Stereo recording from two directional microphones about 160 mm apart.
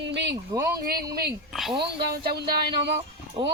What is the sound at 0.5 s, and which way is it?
Speech, 25° right (ahead or behind).